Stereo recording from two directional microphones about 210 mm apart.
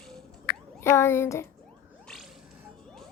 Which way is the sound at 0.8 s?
10° left (ahead or behind).